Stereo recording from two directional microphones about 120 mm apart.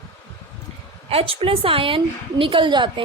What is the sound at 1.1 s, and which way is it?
Speech, 55° right (ahead or behind).